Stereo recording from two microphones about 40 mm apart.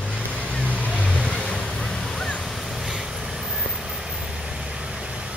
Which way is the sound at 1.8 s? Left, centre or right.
Centre.